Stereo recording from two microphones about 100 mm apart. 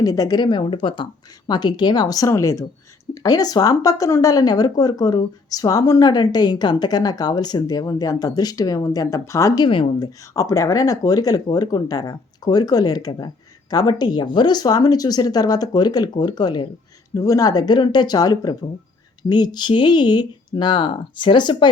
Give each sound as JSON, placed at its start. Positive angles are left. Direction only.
{"t": 0.0, "sound": "speech", "side_deg": 40}